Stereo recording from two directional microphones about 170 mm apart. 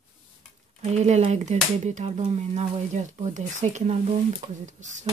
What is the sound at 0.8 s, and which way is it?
Speech, 40° right (ahead or behind).